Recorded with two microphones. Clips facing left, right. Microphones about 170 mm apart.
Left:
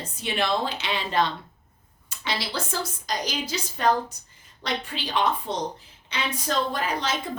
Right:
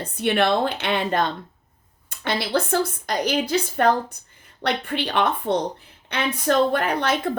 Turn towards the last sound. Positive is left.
turn(degrees=-60)  # may be behind; listen again after turning